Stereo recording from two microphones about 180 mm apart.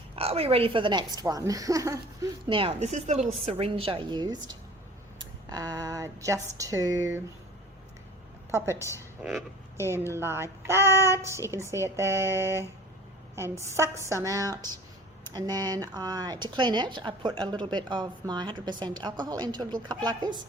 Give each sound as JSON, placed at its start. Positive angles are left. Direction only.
{"t": 0.2, "sound": "a woman's voice", "side_deg": -35}
{"t": 5.5, "sound": "a woman's voice", "side_deg": -20}
{"t": 8.4, "sound": "a woman's voice", "side_deg": -15}
{"t": 8.7, "sound": "a woman's voice", "side_deg": 15}
{"t": 9.7, "sound": "a woman's voice", "side_deg": -15}